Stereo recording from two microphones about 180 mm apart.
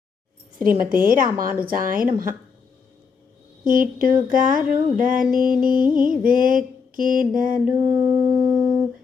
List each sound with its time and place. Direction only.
0.6 s mantra: 50° right (ahead or behind)
3.7 s mantra: 50° right (ahead or behind)
7.3 s mantra: 10° right (ahead or behind)